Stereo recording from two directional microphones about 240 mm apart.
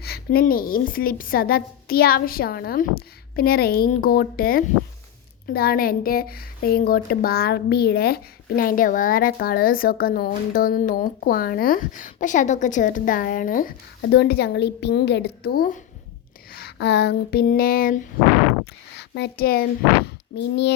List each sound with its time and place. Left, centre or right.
0.0 s a woman's voice: left
16.5 s a sound: left
20.1 s a child's voice: left